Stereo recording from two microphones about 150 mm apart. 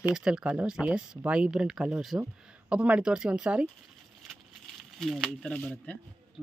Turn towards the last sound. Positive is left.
turn(degrees=5)  # may be behind; listen again after turning